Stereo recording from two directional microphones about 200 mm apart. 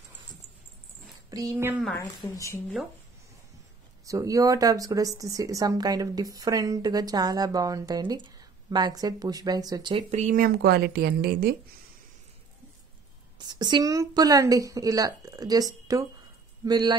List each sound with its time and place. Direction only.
1.3 s speech: 15° right (ahead or behind)
2.3 s speech: 15° left (ahead or behind)
4.0 s speech: 15° right (ahead or behind)
10.1 s a woman's voice: 40° right (ahead or behind)
13.4 s speech: 20° right (ahead or behind)